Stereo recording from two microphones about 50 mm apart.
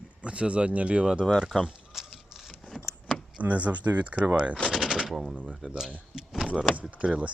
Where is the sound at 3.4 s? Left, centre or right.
Right.